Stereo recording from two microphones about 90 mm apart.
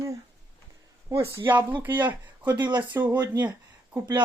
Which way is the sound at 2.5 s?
55° right (ahead or behind).